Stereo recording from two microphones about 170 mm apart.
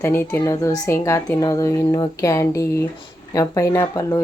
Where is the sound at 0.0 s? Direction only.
15° left (ahead or behind).